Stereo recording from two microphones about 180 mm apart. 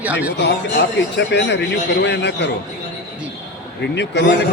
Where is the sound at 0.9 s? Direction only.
75° left (ahead or behind).